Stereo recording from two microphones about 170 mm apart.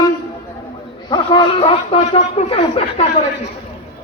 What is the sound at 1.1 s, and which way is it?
A man's voice, 30° left (ahead or behind).